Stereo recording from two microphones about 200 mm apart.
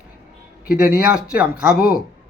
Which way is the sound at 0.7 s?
50° left (ahead or behind).